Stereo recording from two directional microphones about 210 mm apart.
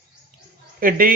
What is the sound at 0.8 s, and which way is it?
Speech, 40° right (ahead or behind).